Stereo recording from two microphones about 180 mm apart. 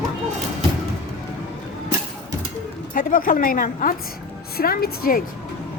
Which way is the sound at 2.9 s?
50° left (ahead or behind).